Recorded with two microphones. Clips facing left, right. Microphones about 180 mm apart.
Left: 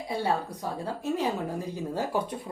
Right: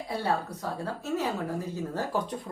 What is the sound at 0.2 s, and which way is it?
A woman's voice, 10° left (ahead or behind).